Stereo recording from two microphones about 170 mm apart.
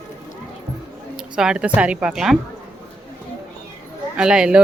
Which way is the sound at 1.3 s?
5° right (ahead or behind).